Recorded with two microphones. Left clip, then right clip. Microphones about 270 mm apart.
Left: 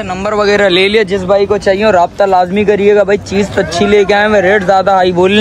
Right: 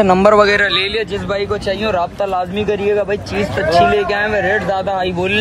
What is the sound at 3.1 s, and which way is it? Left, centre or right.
Speech, left.